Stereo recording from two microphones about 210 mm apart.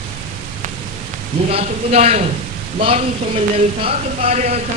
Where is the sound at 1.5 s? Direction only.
30° right (ahead or behind).